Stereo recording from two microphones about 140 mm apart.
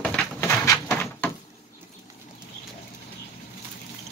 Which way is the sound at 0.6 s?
20° left (ahead or behind).